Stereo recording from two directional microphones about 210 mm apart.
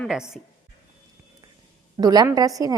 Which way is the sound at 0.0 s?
Centre (ahead or behind).